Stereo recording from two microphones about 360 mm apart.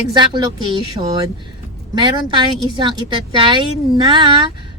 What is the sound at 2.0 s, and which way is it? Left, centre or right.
A woman's voice, centre.